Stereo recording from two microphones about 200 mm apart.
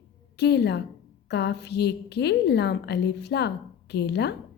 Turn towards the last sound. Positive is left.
turn(degrees=55)  # may be behind; listen again after turning